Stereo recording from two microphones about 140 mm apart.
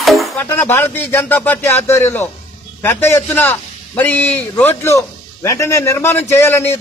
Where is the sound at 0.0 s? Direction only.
Centre (ahead or behind).